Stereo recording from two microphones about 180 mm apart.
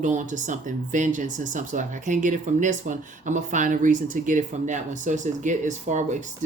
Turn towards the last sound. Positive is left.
turn(degrees=-40)  # may be behind; listen again after turning